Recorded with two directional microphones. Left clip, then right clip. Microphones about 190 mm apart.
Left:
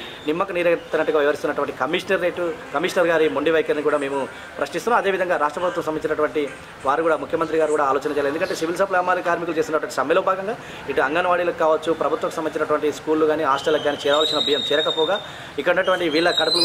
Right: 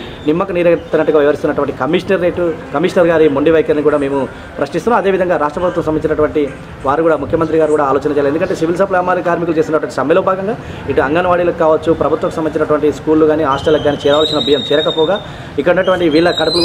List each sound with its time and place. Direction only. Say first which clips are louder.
0.3 s a man's voice: right 8 dB; 10° right (ahead or behind)